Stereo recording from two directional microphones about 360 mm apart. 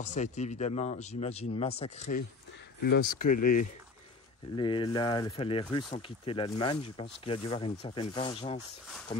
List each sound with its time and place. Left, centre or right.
0.0 s speech: centre
4.6 s speech: centre